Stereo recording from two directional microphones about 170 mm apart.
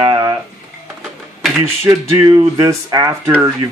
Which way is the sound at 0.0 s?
25° right (ahead or behind).